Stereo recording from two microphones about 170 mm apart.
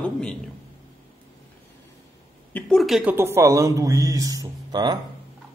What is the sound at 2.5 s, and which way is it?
A man's voice, centre (ahead or behind).